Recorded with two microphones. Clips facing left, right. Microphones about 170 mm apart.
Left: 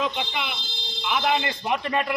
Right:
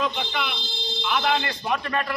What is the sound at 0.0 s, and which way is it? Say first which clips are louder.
A man's voice: right 1 dB; 15° left (ahead or behind).